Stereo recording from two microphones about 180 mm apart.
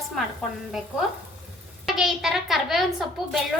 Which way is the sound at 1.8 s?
Centre (ahead or behind).